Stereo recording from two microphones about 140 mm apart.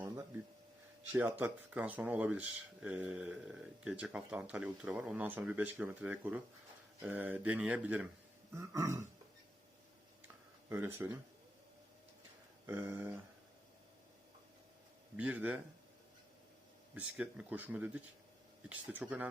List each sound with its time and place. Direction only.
1.1 s speech: 10° right (ahead or behind)
8.5 s throat clearing: 20° right (ahead or behind)
10.7 s speech: 15° right (ahead or behind)
12.6 s speech: 20° right (ahead or behind)
15.1 s speech: 10° right (ahead or behind)
16.9 s speech: 10° right (ahead or behind)